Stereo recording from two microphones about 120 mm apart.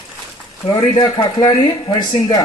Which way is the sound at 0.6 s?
35° left (ahead or behind).